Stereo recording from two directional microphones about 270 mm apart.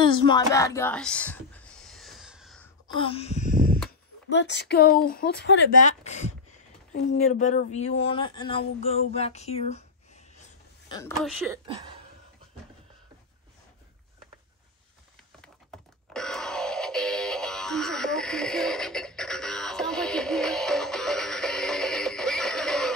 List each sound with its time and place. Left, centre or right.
0.0 s a sound: centre
3.0 s wail: left
4.3 s speech: left
5.9 s wail: left
7.1 s speech: left
11.0 s speech: centre
11.3 s speech: centre
15.4 s computer keyboard: centre